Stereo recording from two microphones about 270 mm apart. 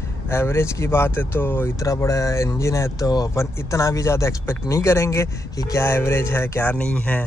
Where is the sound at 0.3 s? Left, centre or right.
Centre.